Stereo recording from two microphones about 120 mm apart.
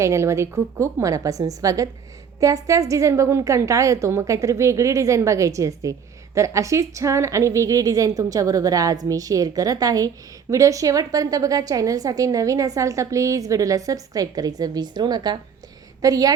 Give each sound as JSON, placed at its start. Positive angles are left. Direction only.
{"t": 0.0, "sound": "a woman's voice", "side_deg": -25}